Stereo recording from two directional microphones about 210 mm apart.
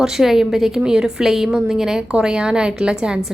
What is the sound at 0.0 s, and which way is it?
A woman's voice, centre (ahead or behind).